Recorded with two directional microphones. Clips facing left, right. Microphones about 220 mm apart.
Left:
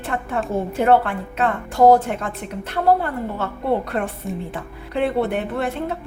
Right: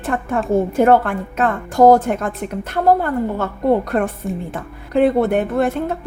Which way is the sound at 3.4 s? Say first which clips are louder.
Right 3 dB; 45° right (ahead or behind).